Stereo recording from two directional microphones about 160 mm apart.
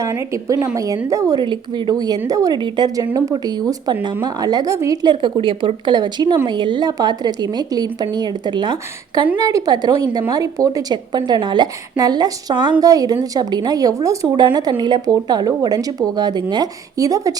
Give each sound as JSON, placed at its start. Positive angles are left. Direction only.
{"t": 0.0, "sound": "a woman's voice", "side_deg": -20}